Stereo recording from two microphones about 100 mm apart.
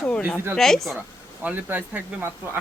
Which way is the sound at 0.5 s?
5° left (ahead or behind).